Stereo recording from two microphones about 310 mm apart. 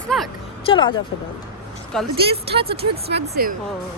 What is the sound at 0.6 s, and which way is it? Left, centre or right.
Speech, centre.